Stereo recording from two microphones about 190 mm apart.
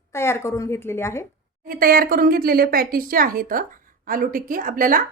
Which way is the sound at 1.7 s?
50° right (ahead or behind).